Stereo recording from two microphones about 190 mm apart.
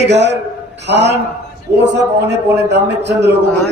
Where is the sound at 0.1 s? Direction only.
65° right (ahead or behind).